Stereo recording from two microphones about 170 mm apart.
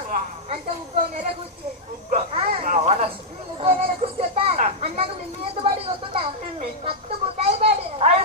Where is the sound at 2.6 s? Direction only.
45° right (ahead or behind).